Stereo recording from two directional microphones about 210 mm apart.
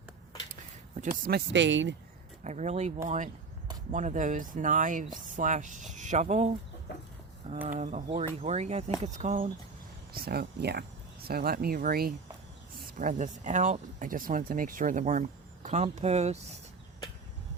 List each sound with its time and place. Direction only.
0.9 s speech: 40° right (ahead or behind)
1.5 s speech: 60° right (ahead or behind)
2.4 s speech: 35° right (ahead or behind)
7.7 s speech: 35° right (ahead or behind)